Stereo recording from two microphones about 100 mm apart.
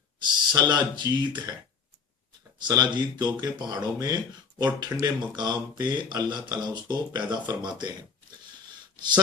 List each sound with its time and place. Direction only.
0.2 s speech: 45° right (ahead or behind)
2.6 s speech: 45° right (ahead or behind)